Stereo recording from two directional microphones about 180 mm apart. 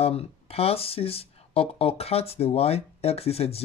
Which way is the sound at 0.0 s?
35° left (ahead or behind).